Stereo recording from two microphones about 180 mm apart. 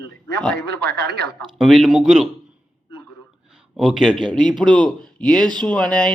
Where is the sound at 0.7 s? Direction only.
65° right (ahead or behind).